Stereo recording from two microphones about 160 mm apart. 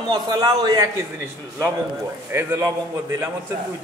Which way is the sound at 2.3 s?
15° right (ahead or behind).